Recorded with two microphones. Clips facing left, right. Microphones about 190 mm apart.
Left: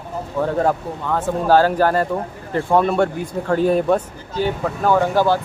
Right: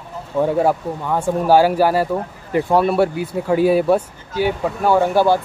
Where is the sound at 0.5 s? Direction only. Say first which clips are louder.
Right 2 dB; 10° right (ahead or behind).